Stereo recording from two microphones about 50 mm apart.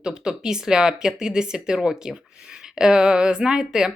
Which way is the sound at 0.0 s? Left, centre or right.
Centre.